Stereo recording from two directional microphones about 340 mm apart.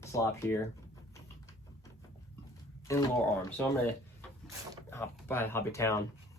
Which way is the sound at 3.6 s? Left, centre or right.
Centre.